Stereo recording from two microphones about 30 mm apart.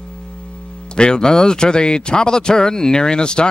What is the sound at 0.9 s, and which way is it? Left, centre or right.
Speech, left.